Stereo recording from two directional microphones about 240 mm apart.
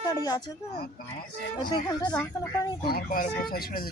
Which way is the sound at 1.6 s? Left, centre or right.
Centre.